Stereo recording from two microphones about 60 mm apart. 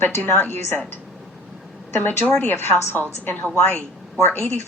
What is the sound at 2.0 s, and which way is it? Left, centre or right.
Speech, left.